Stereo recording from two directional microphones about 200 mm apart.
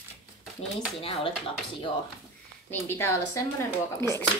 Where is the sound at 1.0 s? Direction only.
30° left (ahead or behind).